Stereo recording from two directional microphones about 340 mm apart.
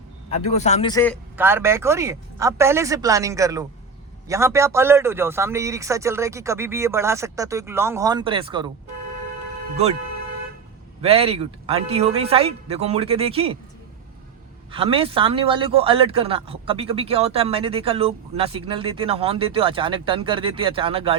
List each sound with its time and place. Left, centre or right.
0.3 s a man's voice: centre
1.4 s a man's voice: centre
11.0 s a man's voice: centre
14.7 s a man's voice: centre